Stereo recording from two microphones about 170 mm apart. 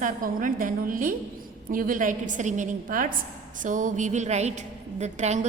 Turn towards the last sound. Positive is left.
turn(degrees=-40)  # may be behind; listen again after turning